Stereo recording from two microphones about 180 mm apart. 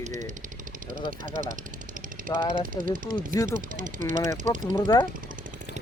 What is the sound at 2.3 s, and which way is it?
Speech, 20° left (ahead or behind).